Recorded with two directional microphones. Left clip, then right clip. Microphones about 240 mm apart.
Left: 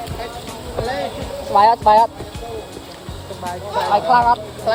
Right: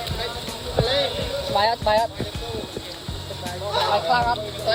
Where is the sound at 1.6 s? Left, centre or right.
Centre.